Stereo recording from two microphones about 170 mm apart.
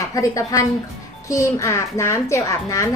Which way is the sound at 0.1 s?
20° left (ahead or behind).